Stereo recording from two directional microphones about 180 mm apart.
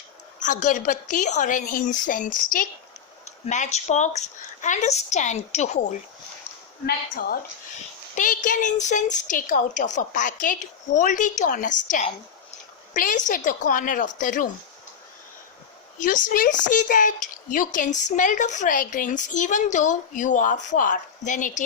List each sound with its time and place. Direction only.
0.4 s speech: 45° left (ahead or behind)
6.8 s a woman's voice: 55° left (ahead or behind)
16.0 s speech: 45° left (ahead or behind)